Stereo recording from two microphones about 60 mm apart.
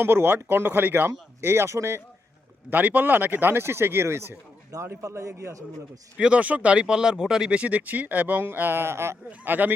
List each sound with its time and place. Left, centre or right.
0.0 s speech: right
2.6 s speech: right
4.7 s a man's voice: right
5.0 s speech: right
6.1 s speech: centre; by 9.1 s right
9.4 s speech: right